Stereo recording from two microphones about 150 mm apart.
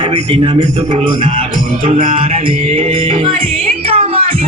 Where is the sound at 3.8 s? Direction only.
40° right (ahead or behind).